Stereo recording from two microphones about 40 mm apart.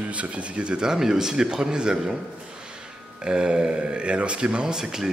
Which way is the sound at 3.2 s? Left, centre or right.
Right.